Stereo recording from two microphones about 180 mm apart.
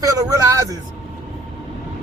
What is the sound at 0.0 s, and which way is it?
Speech, 20° right (ahead or behind).